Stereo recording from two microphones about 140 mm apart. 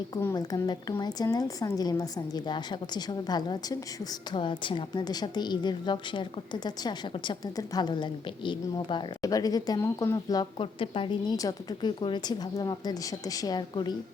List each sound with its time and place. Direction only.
0.3 s a woman's voice: 30° left (ahead or behind)
10.6 s a woman's voice: 40° left (ahead or behind)